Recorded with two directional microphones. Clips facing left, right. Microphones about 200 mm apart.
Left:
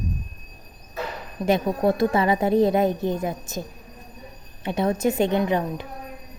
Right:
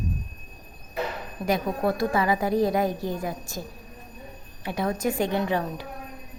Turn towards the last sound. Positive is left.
turn(degrees=20)  # may be behind; listen again after turning